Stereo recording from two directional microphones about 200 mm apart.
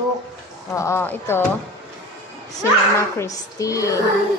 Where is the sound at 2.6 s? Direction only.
15° left (ahead or behind).